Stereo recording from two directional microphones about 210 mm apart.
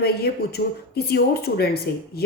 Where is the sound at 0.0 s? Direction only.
50° left (ahead or behind).